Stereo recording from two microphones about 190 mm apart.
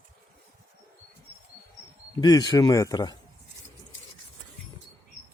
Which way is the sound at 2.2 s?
20° left (ahead or behind).